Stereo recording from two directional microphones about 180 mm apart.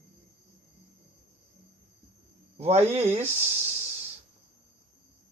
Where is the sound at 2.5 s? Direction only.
35° right (ahead or behind).